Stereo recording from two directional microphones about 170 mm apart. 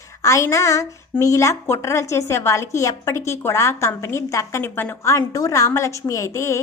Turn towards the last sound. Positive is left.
turn(degrees=15)  # may be behind; listen again after turning